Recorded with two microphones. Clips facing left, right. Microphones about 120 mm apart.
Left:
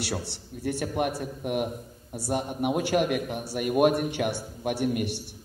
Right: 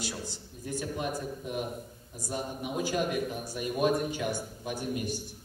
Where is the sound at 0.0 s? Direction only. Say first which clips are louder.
Left 5 dB; 70° left (ahead or behind).